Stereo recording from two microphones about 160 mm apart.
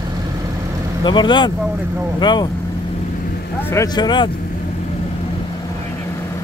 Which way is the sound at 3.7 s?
25° left (ahead or behind).